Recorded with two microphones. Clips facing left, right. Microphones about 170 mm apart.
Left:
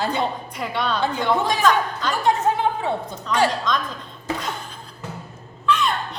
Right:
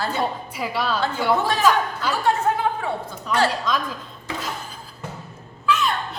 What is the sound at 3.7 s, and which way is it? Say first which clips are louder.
Speech: even; 5° right (ahead or behind).